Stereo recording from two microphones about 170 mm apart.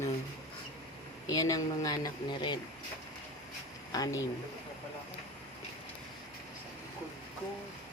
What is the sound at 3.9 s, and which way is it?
Speech, 20° left (ahead or behind).